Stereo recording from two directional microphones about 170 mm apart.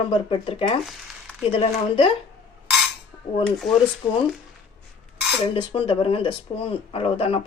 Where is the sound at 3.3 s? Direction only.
35° left (ahead or behind).